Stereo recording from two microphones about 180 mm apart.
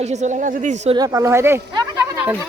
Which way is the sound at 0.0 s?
40° right (ahead or behind).